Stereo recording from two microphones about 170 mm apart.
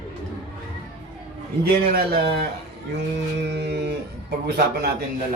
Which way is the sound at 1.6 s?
70° right (ahead or behind).